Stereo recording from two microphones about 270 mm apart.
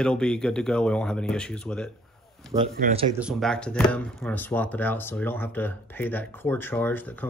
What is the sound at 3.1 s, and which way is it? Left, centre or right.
Speech, centre.